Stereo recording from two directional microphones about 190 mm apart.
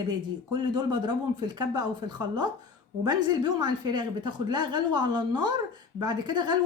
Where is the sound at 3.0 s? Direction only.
20° right (ahead or behind).